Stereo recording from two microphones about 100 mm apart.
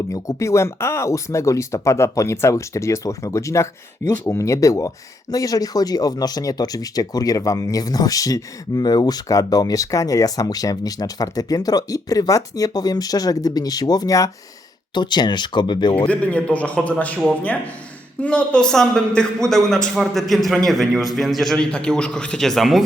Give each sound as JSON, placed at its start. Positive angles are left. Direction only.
{"t": 0.1, "sound": "speech", "side_deg": 30}
{"t": 14.9, "sound": "speech", "side_deg": 45}
{"t": 16.0, "sound": "a man's voice", "side_deg": 15}
{"t": 18.2, "sound": "a man's voice", "side_deg": 10}